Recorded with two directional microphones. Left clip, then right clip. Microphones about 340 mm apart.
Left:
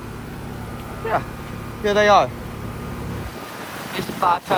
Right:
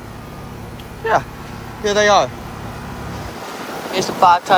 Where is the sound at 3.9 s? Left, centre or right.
Centre.